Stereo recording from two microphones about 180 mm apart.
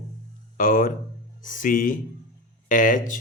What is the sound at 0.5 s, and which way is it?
Speech, 50° left (ahead or behind).